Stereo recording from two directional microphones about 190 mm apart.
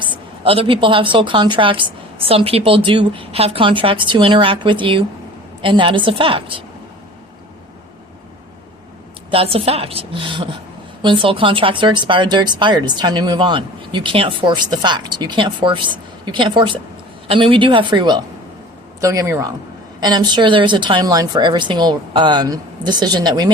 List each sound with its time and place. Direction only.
0.0 s speech: 30° right (ahead or behind)
9.3 s a woman's voice: 30° right (ahead or behind)